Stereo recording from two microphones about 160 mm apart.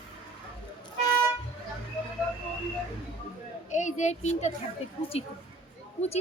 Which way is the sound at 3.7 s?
50° left (ahead or behind).